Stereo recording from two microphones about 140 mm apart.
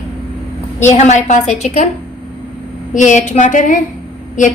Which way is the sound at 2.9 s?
60° left (ahead or behind).